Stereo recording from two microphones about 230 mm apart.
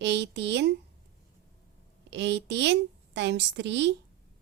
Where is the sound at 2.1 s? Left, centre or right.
Right.